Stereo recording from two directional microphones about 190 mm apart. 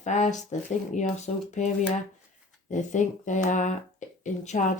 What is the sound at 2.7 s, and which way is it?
Speech, 40° left (ahead or behind).